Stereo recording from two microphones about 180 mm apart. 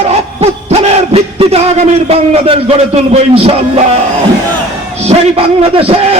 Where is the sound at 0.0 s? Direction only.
35° right (ahead or behind).